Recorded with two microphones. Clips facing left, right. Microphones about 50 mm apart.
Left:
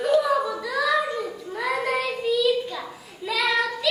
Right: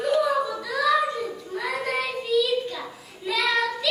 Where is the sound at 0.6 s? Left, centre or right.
Centre.